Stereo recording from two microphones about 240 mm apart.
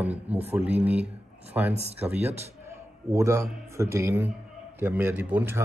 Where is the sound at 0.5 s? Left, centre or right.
Centre.